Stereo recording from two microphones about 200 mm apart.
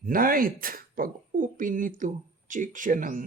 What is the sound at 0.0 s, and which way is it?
Speech, 45° right (ahead or behind).